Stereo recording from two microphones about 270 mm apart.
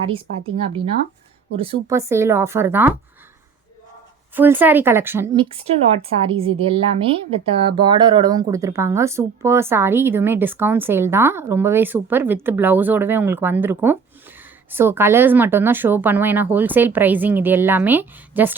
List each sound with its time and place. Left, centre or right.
0.1 s speech: right
4.4 s speech: centre